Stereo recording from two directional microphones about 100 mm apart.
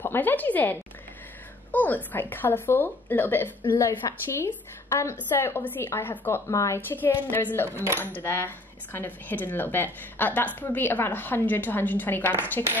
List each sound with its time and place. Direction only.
0.0 s speech: 20° left (ahead or behind)